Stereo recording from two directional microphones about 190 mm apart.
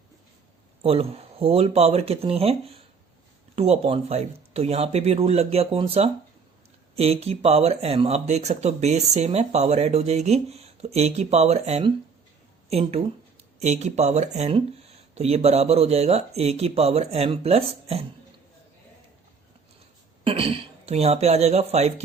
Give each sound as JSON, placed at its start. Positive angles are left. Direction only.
{"t": 0.8, "sound": "speech", "side_deg": -30}
{"t": 13.6, "sound": "speech", "side_deg": -35}
{"t": 20.2, "sound": "speech", "side_deg": -30}